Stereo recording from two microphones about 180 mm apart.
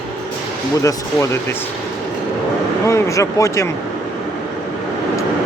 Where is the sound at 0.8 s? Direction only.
15° left (ahead or behind).